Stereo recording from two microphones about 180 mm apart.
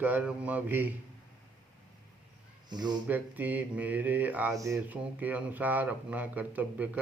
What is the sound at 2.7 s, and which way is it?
Speech, 25° right (ahead or behind).